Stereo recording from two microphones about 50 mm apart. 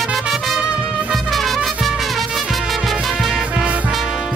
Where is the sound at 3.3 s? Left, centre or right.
Right.